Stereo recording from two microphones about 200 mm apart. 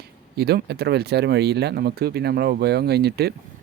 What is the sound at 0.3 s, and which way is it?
Speech, 55° right (ahead or behind).